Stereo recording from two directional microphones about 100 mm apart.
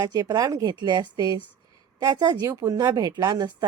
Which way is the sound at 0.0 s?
40° right (ahead or behind).